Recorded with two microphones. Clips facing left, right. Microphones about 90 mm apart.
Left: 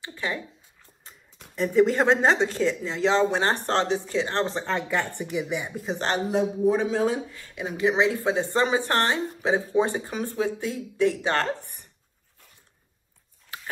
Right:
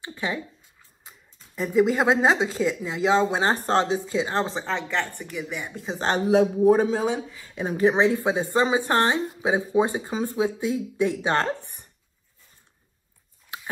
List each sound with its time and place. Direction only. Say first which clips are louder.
0.0 s speech: right 1 dB; 20° right (ahead or behind)
1.5 s speech: even; 5° right (ahead or behind)
6.2 s a man's voice: right 6 dB; 90° right
7.1 s speech: even; centre (ahead or behind)
7.5 s a woman's voice: right 3 dB; 40° right (ahead or behind)
8.2 s speech: right 1 dB; 15° right (ahead or behind)